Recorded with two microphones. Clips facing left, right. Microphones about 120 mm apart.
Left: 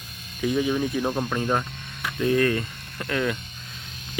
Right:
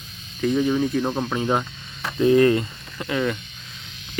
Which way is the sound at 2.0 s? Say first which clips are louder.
Right 6 dB; 25° right (ahead or behind).